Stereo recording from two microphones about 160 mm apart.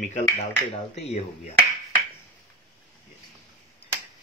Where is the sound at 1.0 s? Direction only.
40° left (ahead or behind).